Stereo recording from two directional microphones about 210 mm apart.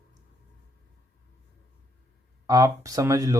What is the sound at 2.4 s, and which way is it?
Speech, 15° right (ahead or behind).